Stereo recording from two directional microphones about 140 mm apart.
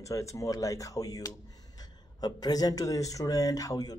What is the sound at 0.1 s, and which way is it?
Speech, 20° left (ahead or behind).